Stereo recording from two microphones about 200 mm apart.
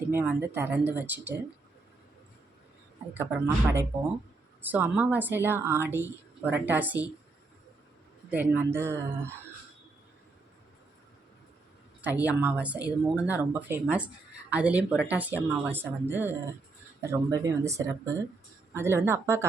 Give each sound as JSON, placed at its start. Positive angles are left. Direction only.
{"t": 0.1, "sound": "speech", "side_deg": -10}
{"t": 3.2, "sound": "speech", "side_deg": -10}
{"t": 8.3, "sound": "speech", "side_deg": -10}
{"t": 12.0, "sound": "speech", "side_deg": -10}